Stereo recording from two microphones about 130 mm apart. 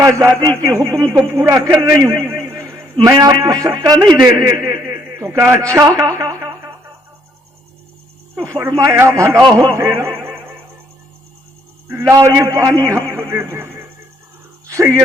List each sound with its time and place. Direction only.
0.0 s a man's voice: 20° right (ahead or behind)
2.3 s a sound: 20° right (ahead or behind)
2.9 s a man's voice: 30° right (ahead or behind)
8.4 s a man's voice: 15° right (ahead or behind)
11.9 s a man's voice: 20° right (ahead or behind)
14.7 s a sound: 20° right (ahead or behind)